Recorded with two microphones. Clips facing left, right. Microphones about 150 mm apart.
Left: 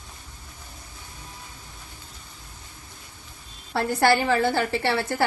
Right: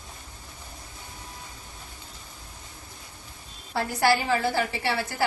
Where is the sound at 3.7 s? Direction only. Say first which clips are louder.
Left 3 dB; 60° left (ahead or behind).